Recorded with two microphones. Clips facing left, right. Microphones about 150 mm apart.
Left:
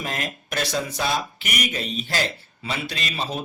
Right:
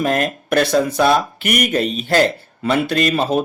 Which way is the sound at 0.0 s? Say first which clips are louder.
Right 12 dB; 55° right (ahead or behind).